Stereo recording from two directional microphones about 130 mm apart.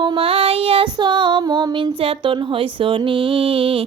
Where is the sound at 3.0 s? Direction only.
40° right (ahead or behind).